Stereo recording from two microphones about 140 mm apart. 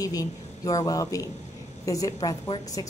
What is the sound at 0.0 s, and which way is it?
Speech, 25° left (ahead or behind).